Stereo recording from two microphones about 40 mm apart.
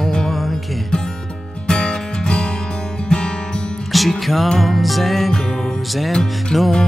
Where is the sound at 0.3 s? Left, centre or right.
Centre.